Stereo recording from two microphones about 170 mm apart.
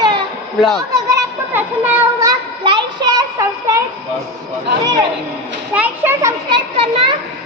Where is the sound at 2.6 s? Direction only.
30° right (ahead or behind).